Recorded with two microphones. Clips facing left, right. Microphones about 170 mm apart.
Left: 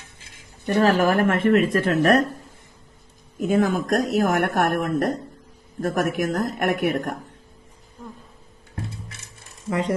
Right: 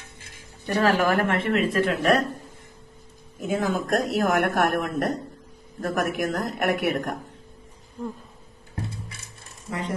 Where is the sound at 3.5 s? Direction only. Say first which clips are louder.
Left 3 dB; 50° left (ahead or behind).